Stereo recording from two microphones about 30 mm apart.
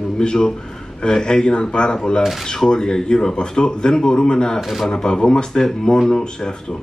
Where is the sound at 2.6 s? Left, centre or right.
Left.